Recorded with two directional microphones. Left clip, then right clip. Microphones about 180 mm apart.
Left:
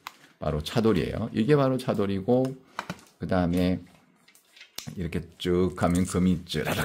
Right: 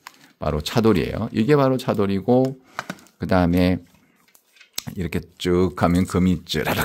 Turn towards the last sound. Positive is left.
turn(degrees=-35)  # may be behind; listen again after turning